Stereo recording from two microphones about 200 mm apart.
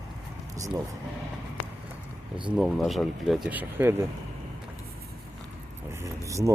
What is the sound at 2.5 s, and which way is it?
Speech, centre (ahead or behind).